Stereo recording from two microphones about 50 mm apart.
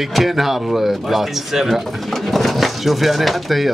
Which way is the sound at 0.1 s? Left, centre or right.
Centre.